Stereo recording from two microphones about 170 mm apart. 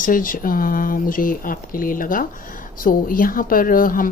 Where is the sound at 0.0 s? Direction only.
55° left (ahead or behind).